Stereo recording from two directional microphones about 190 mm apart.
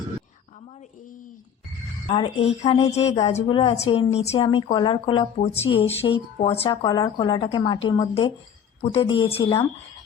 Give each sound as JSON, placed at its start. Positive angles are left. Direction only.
{"t": 2.0, "sound": "a woman's voice", "side_deg": 30}